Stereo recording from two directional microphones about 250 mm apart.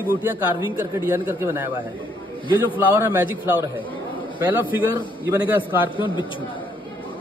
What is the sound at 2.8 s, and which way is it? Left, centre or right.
Speech, centre.